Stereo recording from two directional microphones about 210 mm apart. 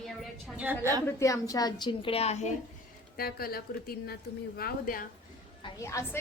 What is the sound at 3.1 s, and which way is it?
A woman's voice, 45° left (ahead or behind).